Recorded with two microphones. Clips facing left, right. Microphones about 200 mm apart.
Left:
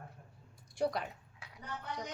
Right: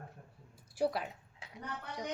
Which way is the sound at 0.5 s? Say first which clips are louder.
Right 1 dB; 5° right (ahead or behind).